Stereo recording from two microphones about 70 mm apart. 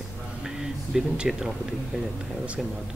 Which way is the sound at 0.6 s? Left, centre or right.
Centre.